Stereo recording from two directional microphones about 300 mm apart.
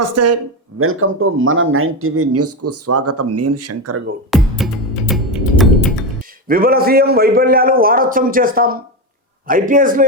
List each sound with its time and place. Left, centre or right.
0.0 s speech: right
0.8 s speech: right
4.3 s music: centre
6.5 s a man's voice: right